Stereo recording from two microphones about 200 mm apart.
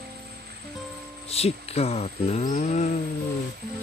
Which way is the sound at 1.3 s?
30° left (ahead or behind).